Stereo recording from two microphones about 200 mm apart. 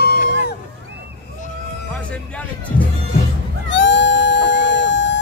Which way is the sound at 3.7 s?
60° left (ahead or behind).